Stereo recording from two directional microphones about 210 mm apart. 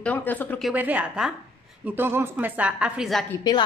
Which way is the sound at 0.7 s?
5° right (ahead or behind).